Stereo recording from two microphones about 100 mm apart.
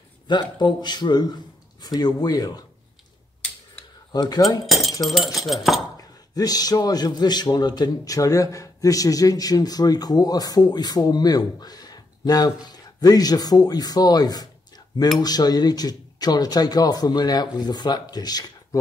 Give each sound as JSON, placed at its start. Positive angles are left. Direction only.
{"t": 0.3, "sound": "a man's voice", "side_deg": 50}
{"t": 4.1, "sound": "speech", "side_deg": 45}
{"t": 4.6, "sound": "a sound", "side_deg": 0}
{"t": 5.0, "sound": "speech", "side_deg": 0}
{"t": 5.9, "sound": "a man's voice", "side_deg": 40}